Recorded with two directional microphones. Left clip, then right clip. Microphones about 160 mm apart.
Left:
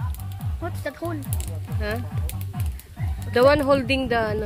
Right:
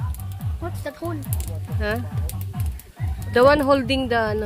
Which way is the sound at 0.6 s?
55° left (ahead or behind).